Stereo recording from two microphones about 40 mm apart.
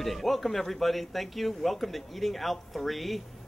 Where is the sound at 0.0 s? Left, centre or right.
Centre.